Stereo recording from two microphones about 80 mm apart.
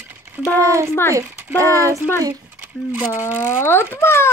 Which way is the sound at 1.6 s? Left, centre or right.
Right.